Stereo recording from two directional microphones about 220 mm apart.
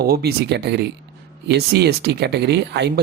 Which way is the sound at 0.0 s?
45° right (ahead or behind).